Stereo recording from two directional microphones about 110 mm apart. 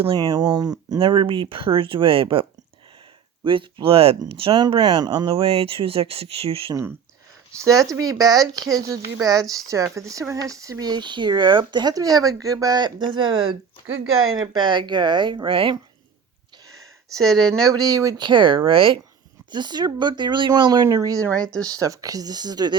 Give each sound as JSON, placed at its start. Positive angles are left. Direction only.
{"t": 0.2, "sound": "speech", "side_deg": -35}
{"t": 0.9, "sound": "speech", "side_deg": -50}
{"t": 4.7, "sound": "speech", "side_deg": -45}
{"t": 7.6, "sound": "speech", "side_deg": -30}
{"t": 17.2, "sound": "speech", "side_deg": 5}
{"t": 17.5, "sound": "speech", "side_deg": -35}
{"t": 18.3, "sound": "speech", "side_deg": -50}
{"t": 19.5, "sound": "speech", "side_deg": -40}
{"t": 20.8, "sound": "speech", "side_deg": -30}